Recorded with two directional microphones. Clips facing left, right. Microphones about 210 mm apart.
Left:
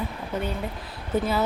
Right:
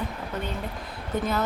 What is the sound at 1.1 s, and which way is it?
Speech, 5° left (ahead or behind).